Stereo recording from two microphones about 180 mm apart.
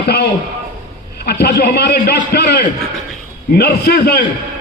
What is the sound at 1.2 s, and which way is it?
A man's voice, 60° left (ahead or behind).